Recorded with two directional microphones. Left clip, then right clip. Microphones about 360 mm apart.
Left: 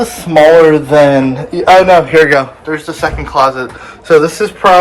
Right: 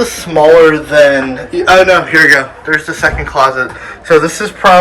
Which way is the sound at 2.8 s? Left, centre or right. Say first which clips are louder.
Right 3 dB; centre.